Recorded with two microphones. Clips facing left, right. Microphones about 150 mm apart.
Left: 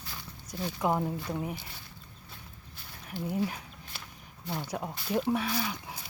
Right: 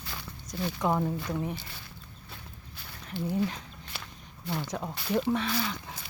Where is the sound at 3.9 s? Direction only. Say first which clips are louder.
Right 4 dB; 75° right (ahead or behind).